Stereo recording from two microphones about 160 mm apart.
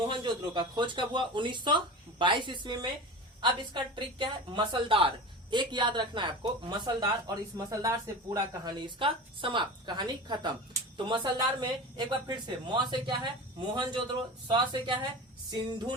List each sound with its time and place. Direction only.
0.2 s speech: 30° right (ahead or behind)
9.0 s a woman's voice: 30° right (ahead or behind)